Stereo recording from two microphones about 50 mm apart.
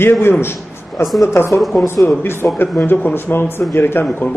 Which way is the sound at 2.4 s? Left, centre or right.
Left.